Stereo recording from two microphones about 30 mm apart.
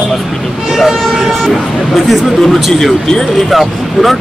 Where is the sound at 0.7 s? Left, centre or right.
Centre.